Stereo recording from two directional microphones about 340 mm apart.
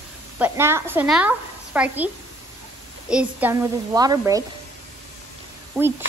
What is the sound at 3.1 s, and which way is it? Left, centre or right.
A child's voice, centre.